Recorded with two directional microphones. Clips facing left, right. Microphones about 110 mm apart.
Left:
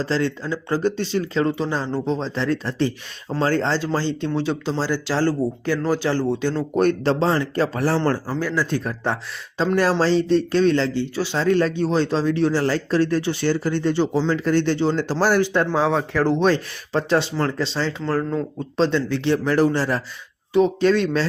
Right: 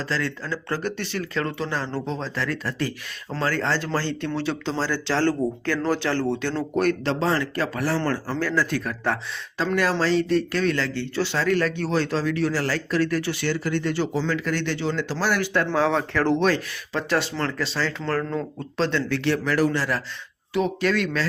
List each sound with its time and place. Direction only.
0.0 s speech: 25° left (ahead or behind)
8.3 s speech: 15° left (ahead or behind)
8.7 s speech: 30° left (ahead or behind)
10.9 s speech: 15° left (ahead or behind); by 15.4 s 35° left (ahead or behind)
15.4 s speech: 20° left (ahead or behind)
16.4 s speech: 30° left (ahead or behind)
18.0 s speech: 10° left (ahead or behind); by 21.2 s 30° left (ahead or behind)